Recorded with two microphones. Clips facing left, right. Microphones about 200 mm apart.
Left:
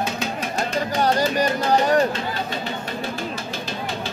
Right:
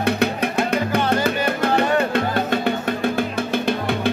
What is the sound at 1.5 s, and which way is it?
Music, 60° right (ahead or behind).